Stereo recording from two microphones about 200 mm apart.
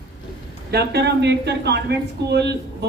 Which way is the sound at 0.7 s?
55° right (ahead or behind).